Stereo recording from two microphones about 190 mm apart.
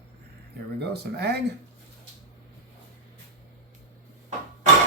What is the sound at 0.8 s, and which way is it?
Speech, 60° right (ahead or behind).